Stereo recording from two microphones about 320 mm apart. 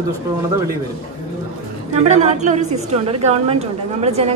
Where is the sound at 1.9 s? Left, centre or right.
Right.